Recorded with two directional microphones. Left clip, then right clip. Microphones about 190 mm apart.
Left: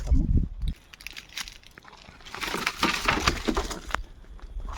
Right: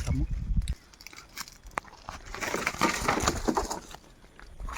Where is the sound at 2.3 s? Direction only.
60° left (ahead or behind).